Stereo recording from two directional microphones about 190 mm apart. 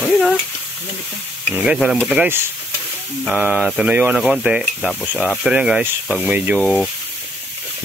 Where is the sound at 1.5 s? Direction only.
5° right (ahead or behind).